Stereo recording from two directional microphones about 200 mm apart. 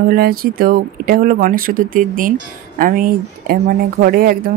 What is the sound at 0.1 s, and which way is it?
Speech, 50° right (ahead or behind).